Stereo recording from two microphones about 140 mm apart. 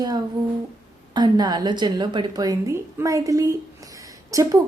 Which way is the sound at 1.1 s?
30° right (ahead or behind).